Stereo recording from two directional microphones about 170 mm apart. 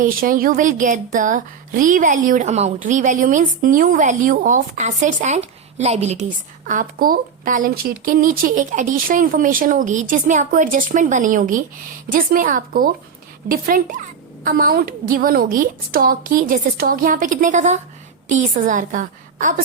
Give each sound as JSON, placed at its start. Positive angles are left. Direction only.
{"t": 0.0, "sound": "speech", "side_deg": -55}
{"t": 6.7, "sound": "a woman's voice", "side_deg": -55}